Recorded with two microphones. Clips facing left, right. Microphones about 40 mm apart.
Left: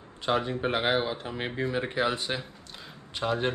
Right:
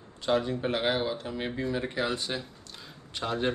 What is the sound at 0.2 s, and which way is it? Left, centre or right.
Speech, left.